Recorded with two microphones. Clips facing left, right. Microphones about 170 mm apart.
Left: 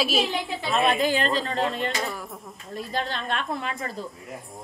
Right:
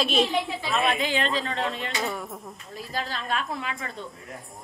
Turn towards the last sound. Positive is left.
turn(degrees=0)  # may be behind; listen again after turning